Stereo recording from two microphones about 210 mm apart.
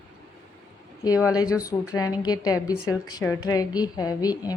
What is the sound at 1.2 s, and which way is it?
A woman's voice, 15° left (ahead or behind).